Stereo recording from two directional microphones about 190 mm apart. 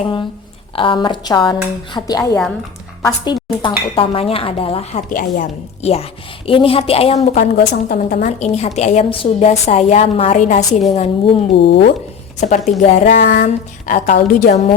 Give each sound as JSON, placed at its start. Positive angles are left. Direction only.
{"t": 0.8, "sound": "a woman's voice", "side_deg": 25}
{"t": 7.3, "sound": "a woman's voice", "side_deg": 55}
{"t": 11.6, "sound": "speech", "side_deg": 60}
{"t": 12.4, "sound": "a woman's voice", "side_deg": 40}
{"t": 13.1, "sound": "speech", "side_deg": 65}
{"t": 13.4, "sound": "speech", "side_deg": 45}